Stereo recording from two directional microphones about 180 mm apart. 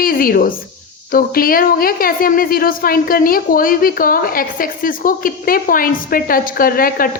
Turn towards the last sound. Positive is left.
turn(degrees=55)  # may be behind; listen again after turning